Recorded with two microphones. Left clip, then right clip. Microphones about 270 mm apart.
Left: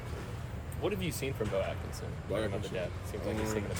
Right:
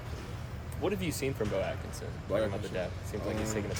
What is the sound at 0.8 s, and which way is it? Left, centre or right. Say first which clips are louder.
Speech: right 2 dB; right.